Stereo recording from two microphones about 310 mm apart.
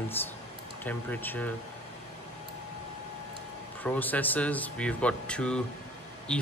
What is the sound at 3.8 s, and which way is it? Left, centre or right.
Speech, centre.